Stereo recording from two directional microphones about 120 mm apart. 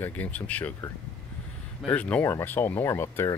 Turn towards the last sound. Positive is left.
turn(degrees=20)  # may be behind; listen again after turning